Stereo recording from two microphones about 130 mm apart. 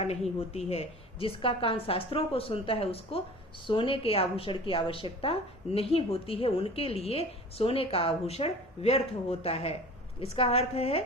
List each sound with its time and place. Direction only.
0.7 s a woman's voice: 50° left (ahead or behind)